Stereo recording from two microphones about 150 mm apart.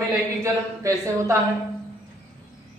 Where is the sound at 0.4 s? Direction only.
20° right (ahead or behind).